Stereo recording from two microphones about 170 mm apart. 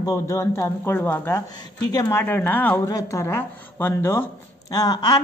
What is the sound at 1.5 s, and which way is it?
Speech, 20° left (ahead or behind).